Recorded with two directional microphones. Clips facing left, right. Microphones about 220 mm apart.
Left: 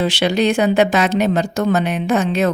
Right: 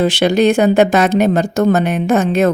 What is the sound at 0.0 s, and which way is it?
Speech, 50° right (ahead or behind).